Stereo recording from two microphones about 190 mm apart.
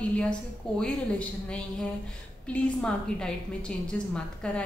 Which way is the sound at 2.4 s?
5° left (ahead or behind).